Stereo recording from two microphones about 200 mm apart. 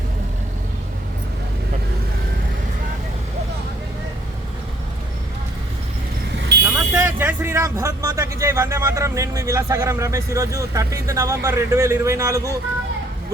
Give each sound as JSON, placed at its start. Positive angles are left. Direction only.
{"t": 6.7, "sound": "speech", "side_deg": -10}